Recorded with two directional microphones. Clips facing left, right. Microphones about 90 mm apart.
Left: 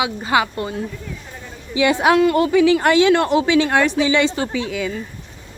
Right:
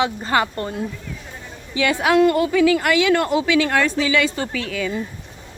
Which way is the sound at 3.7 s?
15° left (ahead or behind).